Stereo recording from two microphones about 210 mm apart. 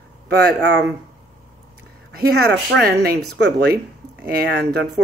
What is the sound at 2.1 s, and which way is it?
Speech, 50° right (ahead or behind).